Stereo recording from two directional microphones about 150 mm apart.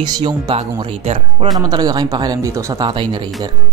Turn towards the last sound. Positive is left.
turn(degrees=-30)  # may be behind; listen again after turning